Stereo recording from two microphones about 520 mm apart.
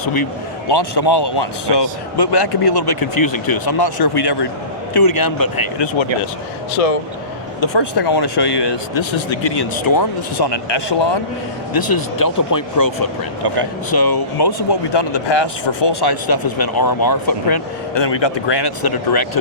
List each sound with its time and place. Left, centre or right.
0.7 s speech: left
6.8 s speech: left
7.6 s speech: left
11.7 s speech: left